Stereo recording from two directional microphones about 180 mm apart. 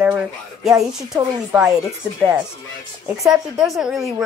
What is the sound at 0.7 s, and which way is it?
A woman's voice, centre (ahead or behind).